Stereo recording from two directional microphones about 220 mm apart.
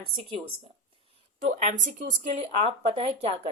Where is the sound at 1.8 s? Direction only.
35° right (ahead or behind).